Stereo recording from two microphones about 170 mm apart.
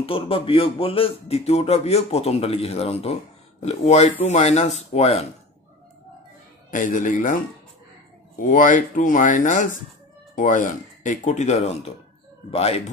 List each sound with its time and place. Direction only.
0.0 s speech: 30° left (ahead or behind)
6.7 s speech: 50° left (ahead or behind)
8.4 s speech: 50° left (ahead or behind)